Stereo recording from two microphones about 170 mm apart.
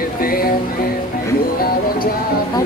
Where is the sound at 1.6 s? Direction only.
60° left (ahead or behind).